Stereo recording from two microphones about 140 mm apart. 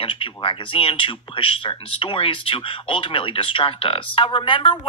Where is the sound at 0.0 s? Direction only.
40° left (ahead or behind).